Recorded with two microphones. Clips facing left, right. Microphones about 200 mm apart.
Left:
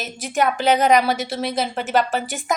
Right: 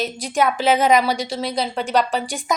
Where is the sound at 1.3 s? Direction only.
55° left (ahead or behind).